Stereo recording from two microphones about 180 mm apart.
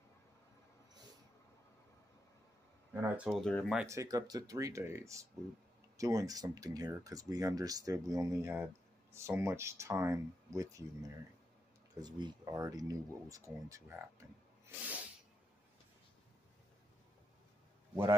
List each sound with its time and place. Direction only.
2.9 s speech: 10° right (ahead or behind)
3.3 s speech: centre (ahead or behind)
3.9 s speech: 20° right (ahead or behind)